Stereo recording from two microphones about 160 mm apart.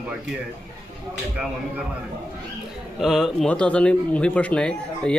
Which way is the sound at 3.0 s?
Centre (ahead or behind).